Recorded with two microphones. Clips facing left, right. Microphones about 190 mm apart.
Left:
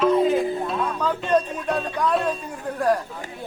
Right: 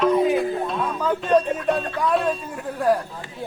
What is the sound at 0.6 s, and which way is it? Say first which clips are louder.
Speech: right 1 dB; centre (ahead or behind).